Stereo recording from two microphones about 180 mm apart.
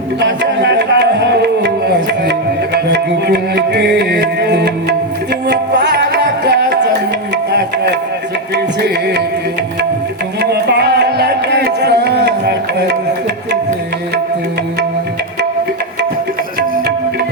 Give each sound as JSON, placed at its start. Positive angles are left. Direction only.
{"t": 0.2, "sound": "music", "side_deg": -75}
{"t": 2.7, "sound": "music", "side_deg": -70}
{"t": 8.5, "sound": "music", "side_deg": -70}
{"t": 10.4, "sound": "music", "side_deg": -65}